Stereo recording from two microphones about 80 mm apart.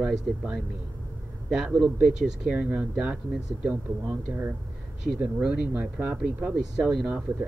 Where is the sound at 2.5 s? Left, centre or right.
Centre.